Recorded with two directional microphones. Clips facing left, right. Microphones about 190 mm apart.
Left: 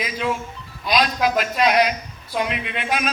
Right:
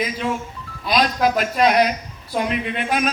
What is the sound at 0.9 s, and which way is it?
A man's voice, 45° right (ahead or behind).